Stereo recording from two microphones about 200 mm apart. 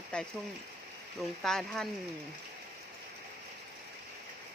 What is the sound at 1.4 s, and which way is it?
Speech, centre (ahead or behind).